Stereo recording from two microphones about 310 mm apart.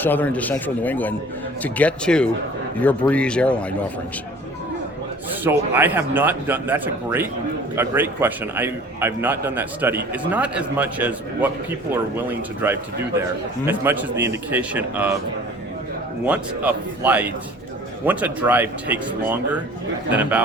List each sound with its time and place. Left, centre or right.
0.0 s speech: centre
5.4 s a man's voice: centre
16.2 s speech: centre